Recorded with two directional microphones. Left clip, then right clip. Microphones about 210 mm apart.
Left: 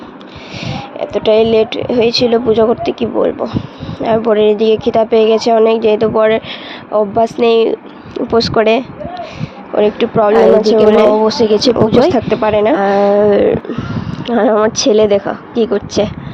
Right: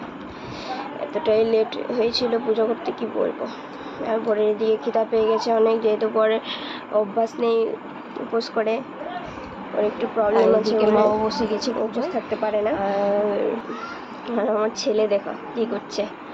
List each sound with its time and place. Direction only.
0.6 s speech: 35° left (ahead or behind)
9.8 s speech: 40° left (ahead or behind)